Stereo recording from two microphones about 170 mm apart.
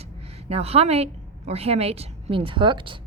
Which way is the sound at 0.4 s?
35° right (ahead or behind).